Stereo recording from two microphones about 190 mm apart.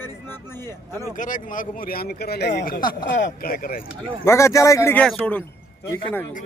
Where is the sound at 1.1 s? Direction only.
45° left (ahead or behind).